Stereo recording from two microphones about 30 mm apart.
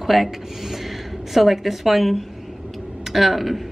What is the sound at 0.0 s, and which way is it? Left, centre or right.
A woman's voice, centre.